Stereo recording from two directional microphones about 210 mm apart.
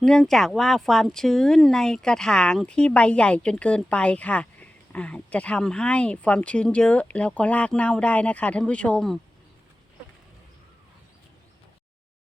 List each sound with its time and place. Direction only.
0.0 s speech: centre (ahead or behind)